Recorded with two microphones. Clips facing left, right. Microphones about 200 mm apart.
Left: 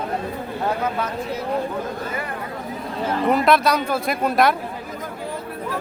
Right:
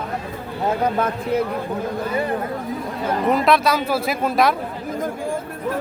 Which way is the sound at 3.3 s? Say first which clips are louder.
Even; centre (ahead or behind).